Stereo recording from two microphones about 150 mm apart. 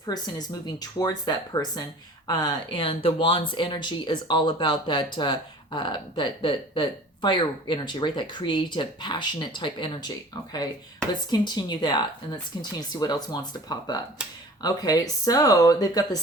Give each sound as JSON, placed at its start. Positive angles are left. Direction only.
{"t": 0.0, "sound": "speech", "side_deg": 25}
{"t": 11.1, "sound": "speech", "side_deg": 30}